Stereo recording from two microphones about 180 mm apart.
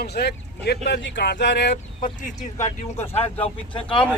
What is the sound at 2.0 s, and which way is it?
Speech, 45° left (ahead or behind).